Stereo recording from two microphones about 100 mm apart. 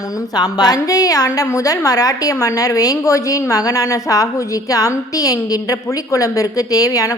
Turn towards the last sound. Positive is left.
turn(degrees=35)  # may be behind; listen again after turning